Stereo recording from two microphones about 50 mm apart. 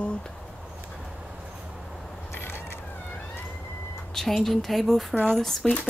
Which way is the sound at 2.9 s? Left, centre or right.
Left.